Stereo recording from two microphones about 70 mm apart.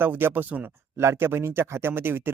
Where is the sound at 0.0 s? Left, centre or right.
Right.